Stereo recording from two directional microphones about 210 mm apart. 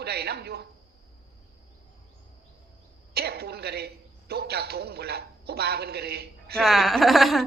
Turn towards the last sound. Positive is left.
turn(degrees=0)  # may be behind; listen again after turning